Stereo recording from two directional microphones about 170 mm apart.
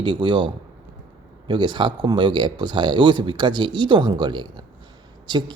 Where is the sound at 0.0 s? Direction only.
30° right (ahead or behind).